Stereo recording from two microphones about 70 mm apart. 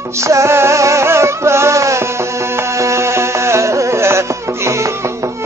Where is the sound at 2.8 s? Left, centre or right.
Right.